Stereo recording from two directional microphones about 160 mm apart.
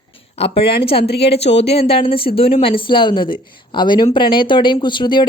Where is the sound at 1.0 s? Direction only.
90° left.